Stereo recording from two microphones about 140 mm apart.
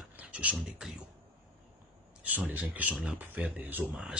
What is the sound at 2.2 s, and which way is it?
Speech, 10° right (ahead or behind).